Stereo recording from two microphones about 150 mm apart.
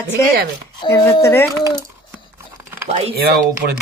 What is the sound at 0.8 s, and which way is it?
Speech, 30° left (ahead or behind).